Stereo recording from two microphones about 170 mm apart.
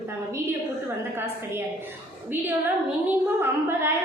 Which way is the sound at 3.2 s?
15° right (ahead or behind).